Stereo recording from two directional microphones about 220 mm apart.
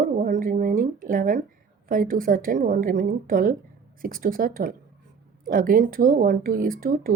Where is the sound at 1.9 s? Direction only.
40° right (ahead or behind).